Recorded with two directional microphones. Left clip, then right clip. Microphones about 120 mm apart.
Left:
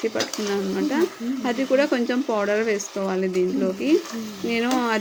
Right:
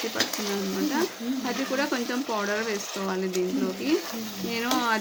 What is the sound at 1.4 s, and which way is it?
Stir, 30° left (ahead or behind).